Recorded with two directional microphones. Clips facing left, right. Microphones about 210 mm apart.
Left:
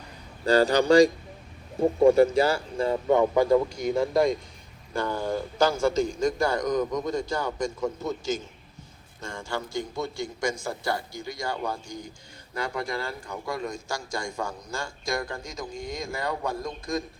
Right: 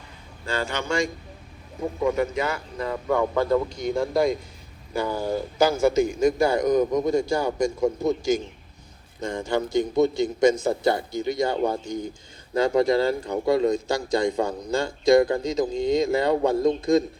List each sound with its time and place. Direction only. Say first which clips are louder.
0.4 s a man's voice: left 8 dB; 35° left (ahead or behind); by 13.8 s 35° right (ahead or behind)
14.1 s a man's voice: right 11 dB; 20° right (ahead or behind)